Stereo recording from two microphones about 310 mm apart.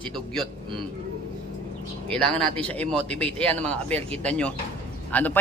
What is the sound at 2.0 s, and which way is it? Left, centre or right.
A man's voice, centre.